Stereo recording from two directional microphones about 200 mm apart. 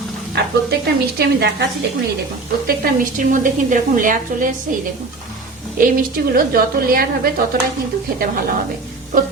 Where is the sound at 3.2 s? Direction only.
40° right (ahead or behind).